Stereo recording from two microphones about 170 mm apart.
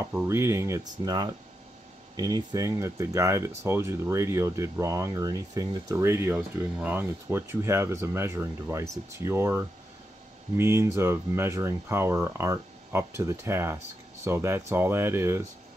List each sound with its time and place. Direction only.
0.1 s speech: 15° right (ahead or behind)